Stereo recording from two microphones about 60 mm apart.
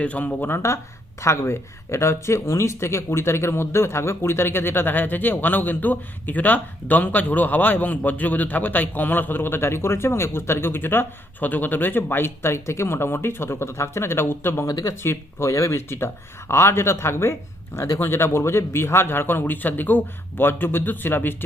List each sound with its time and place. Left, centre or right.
0.0 s speech: left
0.5 s speech: left